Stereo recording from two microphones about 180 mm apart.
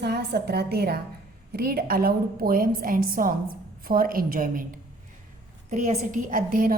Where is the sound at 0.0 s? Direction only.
65° right (ahead or behind).